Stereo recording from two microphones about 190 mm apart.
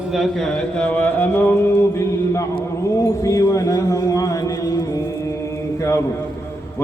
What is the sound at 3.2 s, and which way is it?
A man's voice, 15° left (ahead or behind).